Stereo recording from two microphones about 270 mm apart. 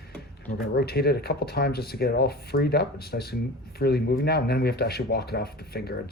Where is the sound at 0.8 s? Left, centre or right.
Left.